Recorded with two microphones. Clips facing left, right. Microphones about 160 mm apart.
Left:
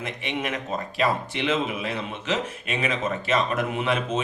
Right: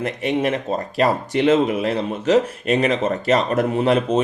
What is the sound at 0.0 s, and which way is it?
A man's voice, 40° right (ahead or behind).